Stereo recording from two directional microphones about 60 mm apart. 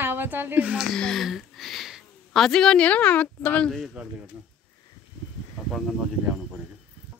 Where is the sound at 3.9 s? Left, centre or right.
Right.